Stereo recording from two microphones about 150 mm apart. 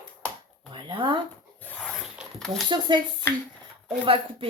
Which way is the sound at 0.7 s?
35° right (ahead or behind).